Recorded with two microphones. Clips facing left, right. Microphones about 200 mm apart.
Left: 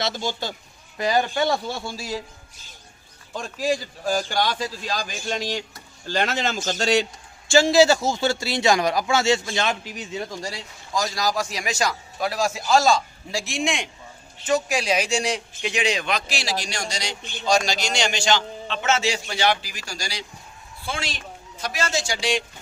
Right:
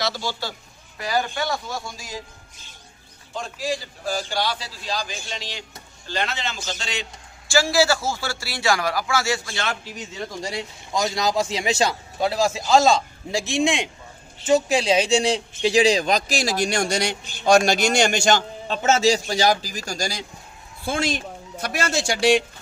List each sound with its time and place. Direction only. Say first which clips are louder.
0.0 s a man's voice: even; 20° left (ahead or behind)
3.3 s a man's voice: left 3 dB; 45° left (ahead or behind)
7.4 s a man's voice: left 4 dB; 20° left (ahead or behind)
10.4 s a man's voice: right 4 dB; 20° right (ahead or behind); by 22.4 s 60° right (ahead or behind)